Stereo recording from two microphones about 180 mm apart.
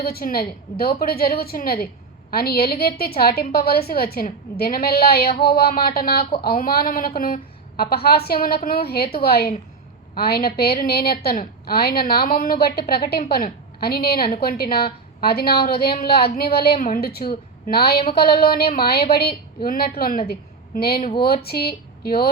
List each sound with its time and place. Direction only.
0.0 s a woman's voice: 55° left (ahead or behind)